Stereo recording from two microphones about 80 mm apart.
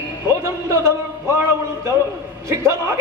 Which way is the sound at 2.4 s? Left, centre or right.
Right.